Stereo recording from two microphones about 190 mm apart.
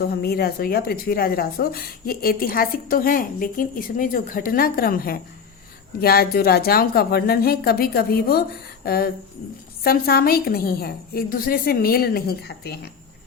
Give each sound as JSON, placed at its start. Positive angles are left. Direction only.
{"t": 0.0, "sound": "speech", "side_deg": 55}